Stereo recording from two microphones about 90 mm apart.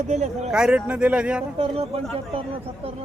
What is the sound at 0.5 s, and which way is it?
Speech, 10° right (ahead or behind).